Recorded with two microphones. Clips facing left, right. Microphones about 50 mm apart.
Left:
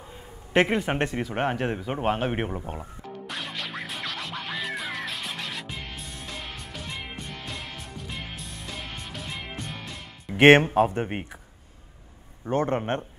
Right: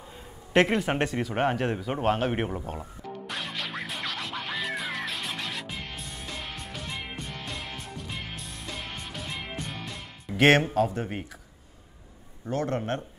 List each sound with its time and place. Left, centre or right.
0.5 s a man's voice: centre
3.3 s music: centre
10.3 s speech: left
12.4 s a man's voice: left